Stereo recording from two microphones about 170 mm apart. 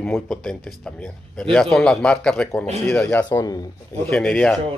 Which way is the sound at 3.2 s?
25° left (ahead or behind).